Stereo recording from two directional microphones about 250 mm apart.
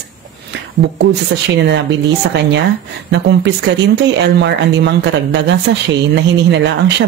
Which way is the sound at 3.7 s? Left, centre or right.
Right.